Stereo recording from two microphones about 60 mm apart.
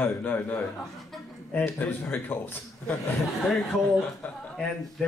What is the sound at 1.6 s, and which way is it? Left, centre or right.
Speech, left.